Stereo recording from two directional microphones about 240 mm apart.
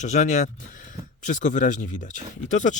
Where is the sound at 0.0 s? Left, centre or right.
Left.